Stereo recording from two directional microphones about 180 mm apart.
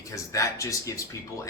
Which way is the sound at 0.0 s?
15° left (ahead or behind).